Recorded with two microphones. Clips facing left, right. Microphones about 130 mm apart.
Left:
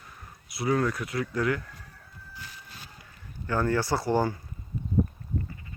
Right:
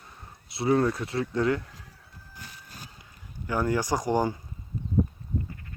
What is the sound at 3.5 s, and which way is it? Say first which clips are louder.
Speech: even; 15° right (ahead or behind).